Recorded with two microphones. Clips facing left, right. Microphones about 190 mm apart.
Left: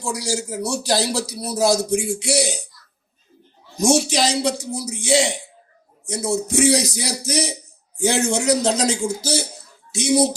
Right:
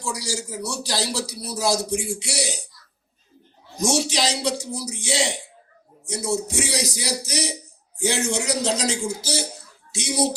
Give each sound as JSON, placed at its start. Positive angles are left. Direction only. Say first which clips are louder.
{"t": 0.0, "sound": "a man's voice", "louder": "left 4 dB", "side_deg": 50}
{"t": 3.8, "sound": "a man's voice", "louder": "left 5 dB", "side_deg": 50}